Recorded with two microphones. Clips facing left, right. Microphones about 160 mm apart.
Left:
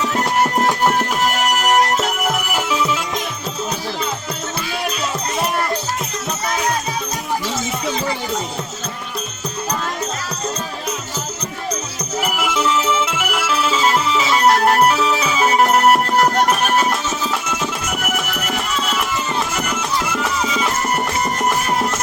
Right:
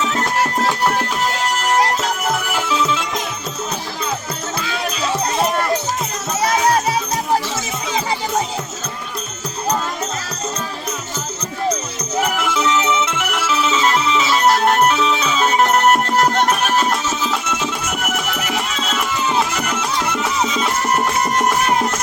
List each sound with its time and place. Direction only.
0.0 s music: 15° left (ahead or behind)
12.2 s music: 5° left (ahead or behind)